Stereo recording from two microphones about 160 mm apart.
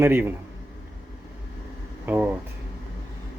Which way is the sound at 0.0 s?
15° right (ahead or behind).